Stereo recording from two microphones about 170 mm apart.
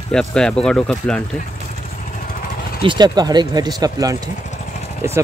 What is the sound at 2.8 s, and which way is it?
Speech, 25° right (ahead or behind).